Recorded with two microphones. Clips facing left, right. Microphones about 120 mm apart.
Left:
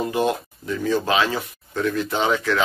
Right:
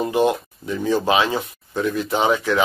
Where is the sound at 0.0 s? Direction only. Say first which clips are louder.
Right 3 dB; 20° right (ahead or behind).